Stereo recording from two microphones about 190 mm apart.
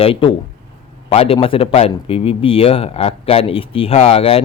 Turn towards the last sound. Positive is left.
turn(degrees=30)  # may be behind; listen again after turning